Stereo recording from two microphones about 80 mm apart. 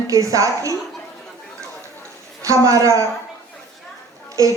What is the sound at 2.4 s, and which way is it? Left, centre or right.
Speech, right.